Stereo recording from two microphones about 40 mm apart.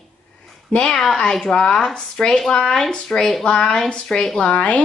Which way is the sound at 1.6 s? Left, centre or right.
Left.